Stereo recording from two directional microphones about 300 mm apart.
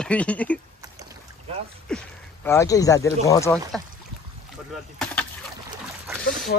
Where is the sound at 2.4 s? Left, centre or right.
Centre.